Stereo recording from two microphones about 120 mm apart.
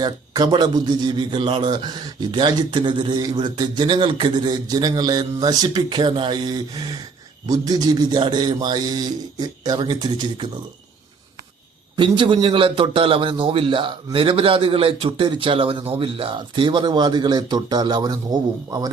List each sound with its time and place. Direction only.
0.0 s a man's voice: 35° right (ahead or behind)
11.9 s a man's voice: 40° right (ahead or behind)